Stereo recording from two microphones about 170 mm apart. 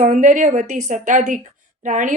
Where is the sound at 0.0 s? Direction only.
50° right (ahead or behind).